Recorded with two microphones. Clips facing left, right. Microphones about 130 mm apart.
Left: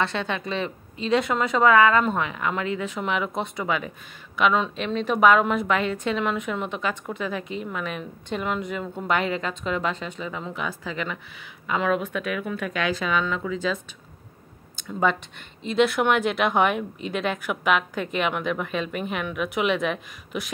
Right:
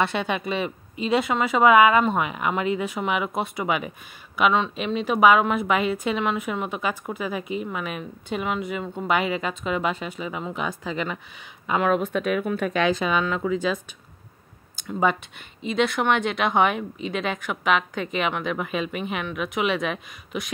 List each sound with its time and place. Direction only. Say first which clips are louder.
0.0 s a woman's voice: right 2 dB; 15° right (ahead or behind)
14.8 s speech: right 1 dB; 10° right (ahead or behind)